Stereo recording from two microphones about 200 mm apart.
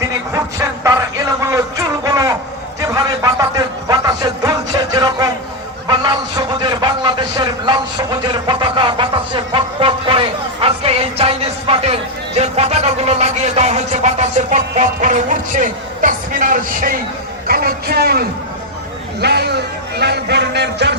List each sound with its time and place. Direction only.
0.9 s a sound: 15° right (ahead or behind)
3.8 s music: 20° right (ahead or behind)
5.9 s a man's voice: 20° right (ahead or behind); by 20.9 s 60° right (ahead or behind)